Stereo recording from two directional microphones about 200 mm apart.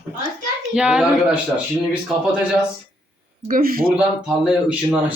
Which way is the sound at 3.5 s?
45° right (ahead or behind).